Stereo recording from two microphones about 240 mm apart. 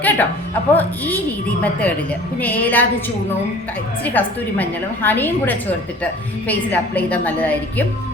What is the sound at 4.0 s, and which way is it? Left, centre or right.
Speech, centre.